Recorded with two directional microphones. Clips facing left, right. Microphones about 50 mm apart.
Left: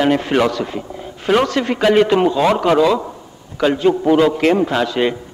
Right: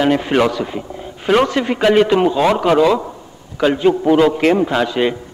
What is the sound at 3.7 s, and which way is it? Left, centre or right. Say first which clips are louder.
A man's voice: right 1 dB; centre.